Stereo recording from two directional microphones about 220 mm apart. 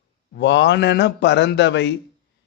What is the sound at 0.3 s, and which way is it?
A man's voice, 55° left (ahead or behind).